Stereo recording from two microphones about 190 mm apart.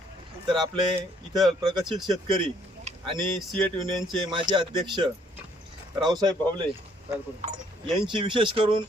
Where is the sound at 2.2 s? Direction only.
25° right (ahead or behind).